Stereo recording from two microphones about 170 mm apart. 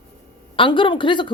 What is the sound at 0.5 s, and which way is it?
Speech, 30° left (ahead or behind).